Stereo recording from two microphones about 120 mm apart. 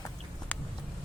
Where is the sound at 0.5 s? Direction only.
15° left (ahead or behind).